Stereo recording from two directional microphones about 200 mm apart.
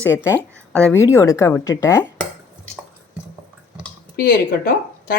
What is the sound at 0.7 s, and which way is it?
Speech, 10° left (ahead or behind).